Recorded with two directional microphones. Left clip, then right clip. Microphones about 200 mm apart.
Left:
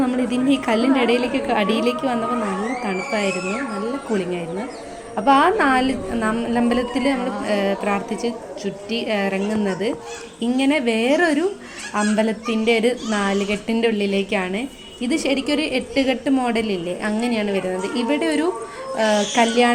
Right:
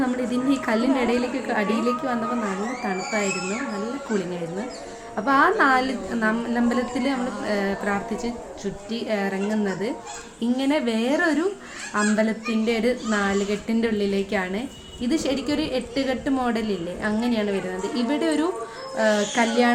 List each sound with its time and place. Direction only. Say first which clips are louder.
0.3 s a woman's voice: left 4 dB; 10° left (ahead or behind)
5.1 s a woman's voice: left 4 dB; 15° left (ahead or behind)